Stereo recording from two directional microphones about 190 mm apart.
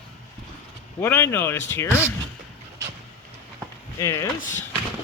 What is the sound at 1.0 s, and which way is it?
Speech, 10° left (ahead or behind).